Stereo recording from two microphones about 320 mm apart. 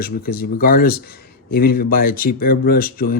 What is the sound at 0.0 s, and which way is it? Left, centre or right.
Speech, left.